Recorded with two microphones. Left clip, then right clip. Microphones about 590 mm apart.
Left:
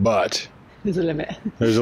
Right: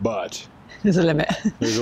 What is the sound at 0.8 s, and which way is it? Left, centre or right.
Speech, right.